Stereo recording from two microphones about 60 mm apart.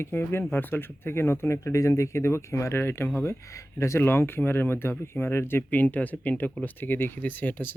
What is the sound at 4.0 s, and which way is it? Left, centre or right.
Speech, left.